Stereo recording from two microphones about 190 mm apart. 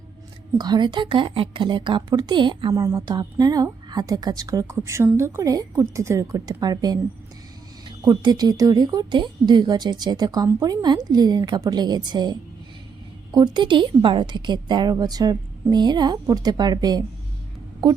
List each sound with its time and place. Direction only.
0.6 s a woman's voice: 20° right (ahead or behind)